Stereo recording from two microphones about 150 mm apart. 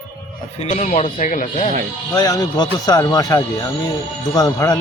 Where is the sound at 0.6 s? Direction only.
55° left (ahead or behind).